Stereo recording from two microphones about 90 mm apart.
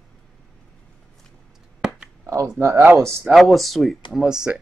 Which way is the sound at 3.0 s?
35° right (ahead or behind).